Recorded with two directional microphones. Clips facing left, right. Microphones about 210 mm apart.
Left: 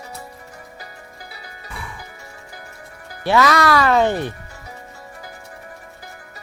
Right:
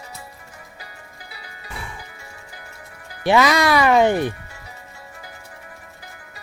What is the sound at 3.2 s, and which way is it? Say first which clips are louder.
Speech: even; 15° right (ahead or behind).